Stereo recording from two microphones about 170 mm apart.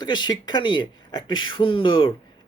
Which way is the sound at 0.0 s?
25° left (ahead or behind).